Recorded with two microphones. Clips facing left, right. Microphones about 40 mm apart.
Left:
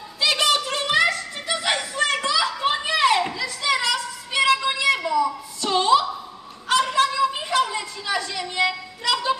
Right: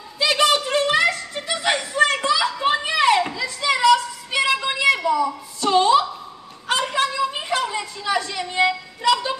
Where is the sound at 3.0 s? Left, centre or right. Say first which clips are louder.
Right 1 dB; right.